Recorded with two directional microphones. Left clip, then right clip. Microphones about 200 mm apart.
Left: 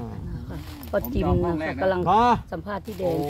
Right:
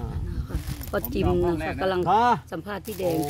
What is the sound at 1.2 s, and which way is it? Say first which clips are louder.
Speech: even; 15° left (ahead or behind).